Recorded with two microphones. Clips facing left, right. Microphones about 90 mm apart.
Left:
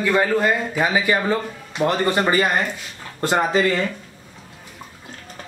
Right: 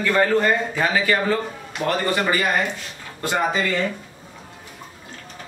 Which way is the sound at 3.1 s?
40° left (ahead or behind).